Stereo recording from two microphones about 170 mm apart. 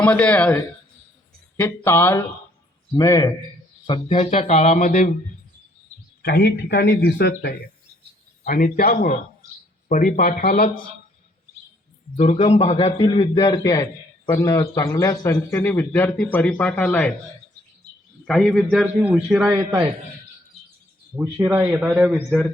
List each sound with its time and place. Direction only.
0.0 s a man's voice: 10° left (ahead or behind); by 5.0 s 50° left (ahead or behind)
6.2 s speech: 75° left (ahead or behind)
8.4 s speech: 55° left (ahead or behind)
12.1 s speech: 40° left (ahead or behind)
13.3 s a man's voice: 20° left (ahead or behind)
18.3 s a man's voice: centre (ahead or behind); by 19.9 s 15° right (ahead or behind)
21.2 s a man's voice: 15° right (ahead or behind)